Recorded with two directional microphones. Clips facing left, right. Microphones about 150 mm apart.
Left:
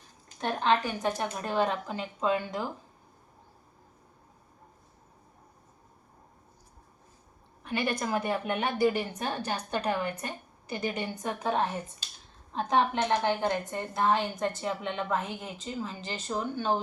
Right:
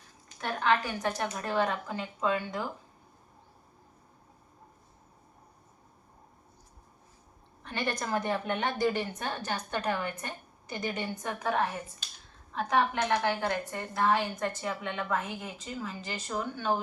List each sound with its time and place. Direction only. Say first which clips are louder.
0.3 s a woman's voice: left 2 dB; 25° left (ahead or behind)
7.6 s a woman's voice: left 3 dB; 10° left (ahead or behind)